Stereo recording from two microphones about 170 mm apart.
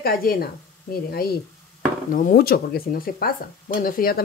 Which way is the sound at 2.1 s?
55° left (ahead or behind).